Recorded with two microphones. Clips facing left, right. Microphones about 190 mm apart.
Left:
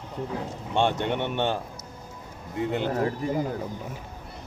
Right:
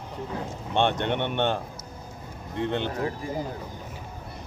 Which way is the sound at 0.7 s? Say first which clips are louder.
Even; 10° left (ahead or behind).